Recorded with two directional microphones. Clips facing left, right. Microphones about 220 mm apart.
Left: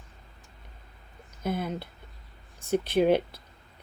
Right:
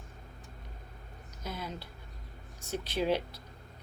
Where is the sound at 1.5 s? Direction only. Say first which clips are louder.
Left 9 dB; 55° left (ahead or behind).